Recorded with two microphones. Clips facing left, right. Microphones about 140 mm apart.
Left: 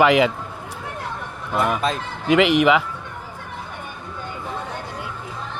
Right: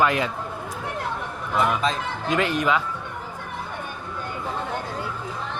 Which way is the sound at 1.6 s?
55° left (ahead or behind).